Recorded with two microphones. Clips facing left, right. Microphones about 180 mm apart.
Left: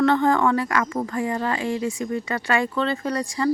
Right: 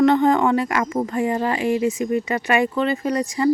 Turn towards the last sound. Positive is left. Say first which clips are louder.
# right 4 dB
turn(degrees=-15)  # may be behind; listen again after turning